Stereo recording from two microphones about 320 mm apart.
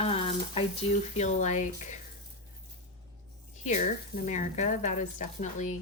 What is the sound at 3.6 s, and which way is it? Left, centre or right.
A woman's voice, left.